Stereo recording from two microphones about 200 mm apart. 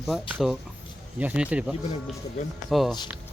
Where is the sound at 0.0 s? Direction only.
Centre (ahead or behind).